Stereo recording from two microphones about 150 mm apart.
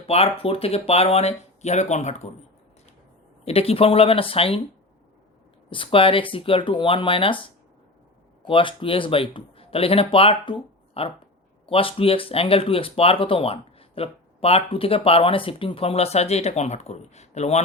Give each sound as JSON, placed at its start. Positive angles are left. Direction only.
{"t": 0.1, "sound": "speech", "side_deg": 40}
{"t": 3.4, "sound": "speech", "side_deg": 40}
{"t": 5.7, "sound": "speech", "side_deg": 35}
{"t": 8.4, "sound": "speech", "side_deg": 35}